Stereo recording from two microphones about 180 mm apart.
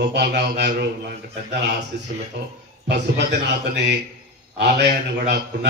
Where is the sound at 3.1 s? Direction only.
70° right (ahead or behind).